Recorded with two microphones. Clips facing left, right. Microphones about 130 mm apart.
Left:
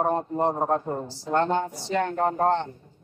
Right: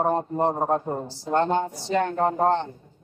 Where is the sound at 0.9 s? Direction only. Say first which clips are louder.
Right 1 dB; 25° right (ahead or behind).